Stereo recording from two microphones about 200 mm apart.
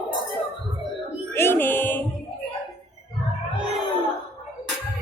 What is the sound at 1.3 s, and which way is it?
Music, 10° left (ahead or behind).